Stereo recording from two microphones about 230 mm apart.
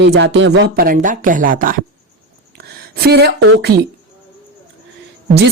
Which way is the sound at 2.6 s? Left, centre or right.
Right.